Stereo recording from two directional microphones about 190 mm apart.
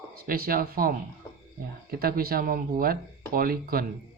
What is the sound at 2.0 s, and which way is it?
Speech, 50° right (ahead or behind).